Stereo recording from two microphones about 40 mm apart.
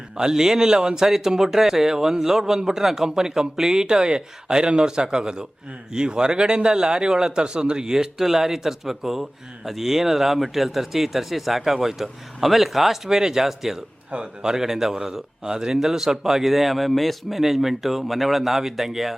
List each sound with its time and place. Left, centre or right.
0.2 s speech: centre